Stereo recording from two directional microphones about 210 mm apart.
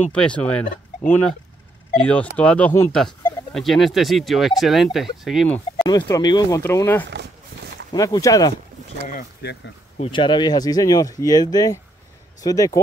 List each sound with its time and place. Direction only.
0.1 s speech: 5° left (ahead or behind)
5.9 s speech: 20° left (ahead or behind)
7.1 s a sound: 55° right (ahead or behind)
7.9 s speech: 15° left (ahead or behind)
9.0 s speech: 45° left (ahead or behind)
9.9 s speech: 25° left (ahead or behind)